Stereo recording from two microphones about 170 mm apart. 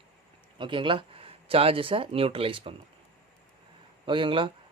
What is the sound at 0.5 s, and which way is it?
Speech, 30° right (ahead or behind).